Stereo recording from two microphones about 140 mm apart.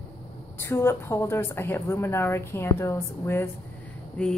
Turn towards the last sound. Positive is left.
turn(degrees=10)  # may be behind; listen again after turning